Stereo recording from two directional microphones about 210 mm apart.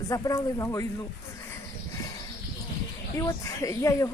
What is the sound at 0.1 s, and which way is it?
Speech, 15° left (ahead or behind).